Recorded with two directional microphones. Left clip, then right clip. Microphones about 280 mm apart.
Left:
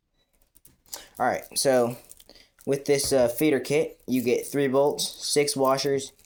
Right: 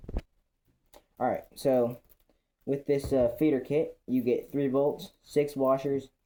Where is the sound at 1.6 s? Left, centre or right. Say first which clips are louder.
Left 4 dB; left.